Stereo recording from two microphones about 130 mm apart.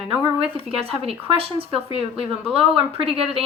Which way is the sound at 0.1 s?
45° right (ahead or behind).